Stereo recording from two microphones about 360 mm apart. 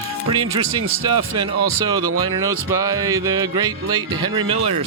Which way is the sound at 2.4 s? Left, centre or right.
Centre.